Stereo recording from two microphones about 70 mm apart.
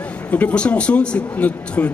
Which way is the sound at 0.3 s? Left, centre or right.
Left.